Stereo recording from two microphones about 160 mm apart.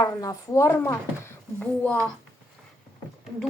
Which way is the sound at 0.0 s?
20° left (ahead or behind).